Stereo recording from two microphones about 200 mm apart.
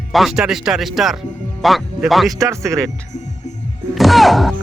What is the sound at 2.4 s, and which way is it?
Speech, 15° right (ahead or behind).